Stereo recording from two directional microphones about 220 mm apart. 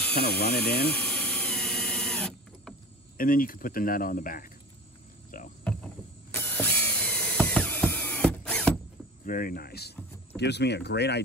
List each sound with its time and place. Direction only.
0.1 s speech: 50° left (ahead or behind)
1.0 s drill: 5° left (ahead or behind)
3.2 s speech: 40° left (ahead or behind)
5.3 s rowboat: 40° left (ahead or behind)
6.3 s a sound: 5° left (ahead or behind)
9.2 s speech: 40° left (ahead or behind)